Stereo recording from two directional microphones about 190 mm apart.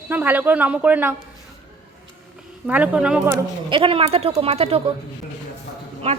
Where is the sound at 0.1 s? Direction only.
10° right (ahead or behind).